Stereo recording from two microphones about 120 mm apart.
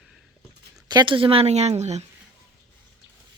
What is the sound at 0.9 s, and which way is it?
Speech, 40° right (ahead or behind).